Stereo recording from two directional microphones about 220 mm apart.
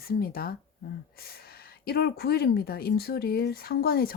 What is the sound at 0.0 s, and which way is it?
Speech, 45° left (ahead or behind).